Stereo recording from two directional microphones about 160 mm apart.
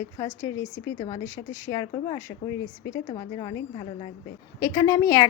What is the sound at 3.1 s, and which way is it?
A woman's voice, 30° left (ahead or behind).